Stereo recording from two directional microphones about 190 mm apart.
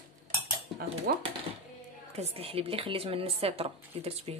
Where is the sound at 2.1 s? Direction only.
30° right (ahead or behind).